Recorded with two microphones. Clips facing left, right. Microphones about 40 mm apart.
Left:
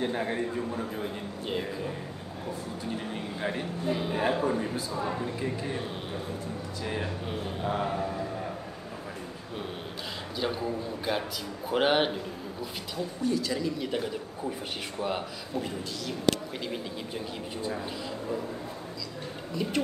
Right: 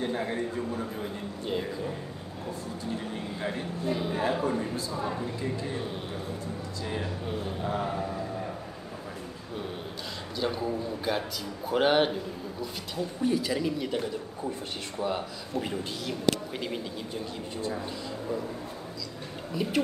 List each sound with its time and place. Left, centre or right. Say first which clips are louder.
0.0 s a man's voice: left 1 dB; centre
3.1 s a man's voice: left 1 dB; centre
5.4 s speech: even; left
6.8 s speech: left 1 dB; left
7.3 s speech: left 1 dB; centre
10.4 s a man's voice: right 1 dB; centre
13.2 s a woman's voice: right 2 dB; centre
15.0 s a man's voice: right 2 dB; centre
19.5 s speech: right 1 dB; centre